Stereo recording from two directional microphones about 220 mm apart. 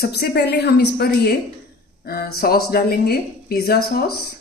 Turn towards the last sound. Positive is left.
turn(degrees=45)  # may be behind; listen again after turning